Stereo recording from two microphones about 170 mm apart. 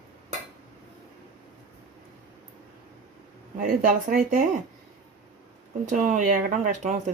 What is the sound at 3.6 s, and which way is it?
Speech, 55° right (ahead or behind).